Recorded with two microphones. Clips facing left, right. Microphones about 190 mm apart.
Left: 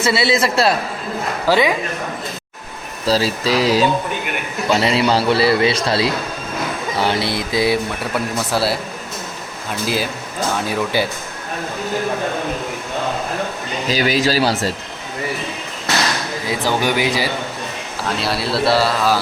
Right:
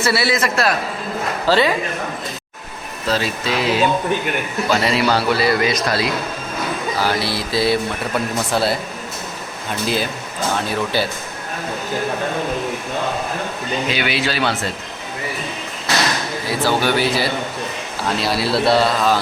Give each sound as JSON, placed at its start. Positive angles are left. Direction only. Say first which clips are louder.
{"t": 0.0, "sound": "a man's voice", "louder": "left 2 dB", "side_deg": 20}
{"t": 1.5, "sound": "speech", "louder": "left 1 dB", "side_deg": 15}
{"t": 3.1, "sound": "a man's voice", "louder": "left 4 dB", "side_deg": 35}
{"t": 4.7, "sound": "a man's voice", "louder": "left 2 dB", "side_deg": 25}
{"t": 8.5, "sound": "speech", "louder": "even", "side_deg": 5}
{"t": 9.8, "sound": "speech", "louder": "even", "side_deg": 5}
{"t": 13.8, "sound": "a man's voice", "louder": "left 6 dB", "side_deg": 35}
{"t": 16.5, "sound": "speech", "louder": "right 1 dB", "side_deg": 15}
{"t": 18.2, "sound": "speech", "louder": "right 1 dB", "side_deg": 0}